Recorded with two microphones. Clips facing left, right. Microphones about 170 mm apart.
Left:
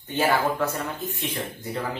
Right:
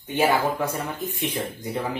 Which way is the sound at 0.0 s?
10° right (ahead or behind).